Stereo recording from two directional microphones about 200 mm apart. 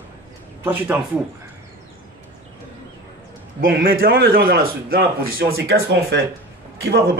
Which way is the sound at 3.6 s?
45° right (ahead or behind).